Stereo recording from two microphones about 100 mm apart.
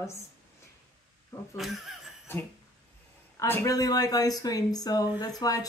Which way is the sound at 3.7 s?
40° left (ahead or behind).